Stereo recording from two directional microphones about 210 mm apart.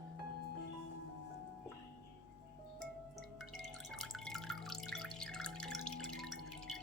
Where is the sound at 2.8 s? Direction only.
Centre (ahead or behind).